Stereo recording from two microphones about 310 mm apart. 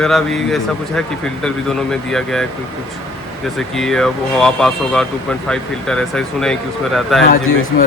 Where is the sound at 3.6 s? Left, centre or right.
Centre.